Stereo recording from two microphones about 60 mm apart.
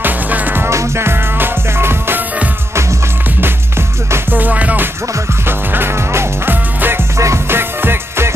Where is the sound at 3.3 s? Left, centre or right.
Right.